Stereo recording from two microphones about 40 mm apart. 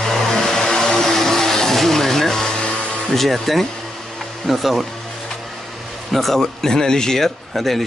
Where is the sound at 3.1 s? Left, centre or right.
Centre.